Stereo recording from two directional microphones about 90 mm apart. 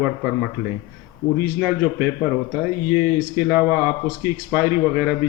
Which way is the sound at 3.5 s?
20° right (ahead or behind).